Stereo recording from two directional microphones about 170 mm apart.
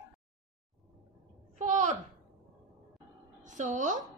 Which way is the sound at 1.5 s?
45° right (ahead or behind).